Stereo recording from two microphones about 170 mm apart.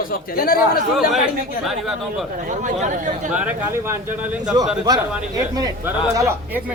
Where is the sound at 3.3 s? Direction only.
10° right (ahead or behind).